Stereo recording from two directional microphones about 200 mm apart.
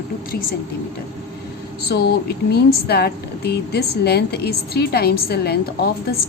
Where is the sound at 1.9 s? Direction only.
55° left (ahead or behind).